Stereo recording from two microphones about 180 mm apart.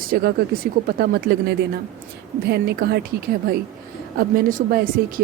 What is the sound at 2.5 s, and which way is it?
Speech, 60° right (ahead or behind).